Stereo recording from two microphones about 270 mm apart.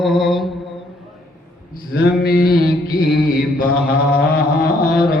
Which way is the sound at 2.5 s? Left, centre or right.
Left.